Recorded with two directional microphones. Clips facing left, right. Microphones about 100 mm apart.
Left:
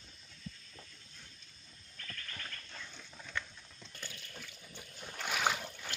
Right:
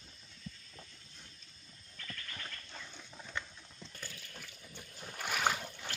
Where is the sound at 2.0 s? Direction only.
15° right (ahead or behind).